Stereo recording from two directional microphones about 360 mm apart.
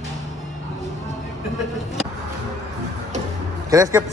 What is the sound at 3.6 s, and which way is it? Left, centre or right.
Speech, centre.